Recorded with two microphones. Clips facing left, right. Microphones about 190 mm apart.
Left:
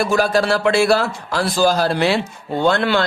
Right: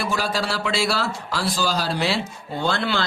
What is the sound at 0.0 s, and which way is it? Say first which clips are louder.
A man's voice: left 8 dB; 50° left (ahead or behind).